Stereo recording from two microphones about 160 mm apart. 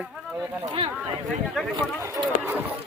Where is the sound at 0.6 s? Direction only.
35° right (ahead or behind).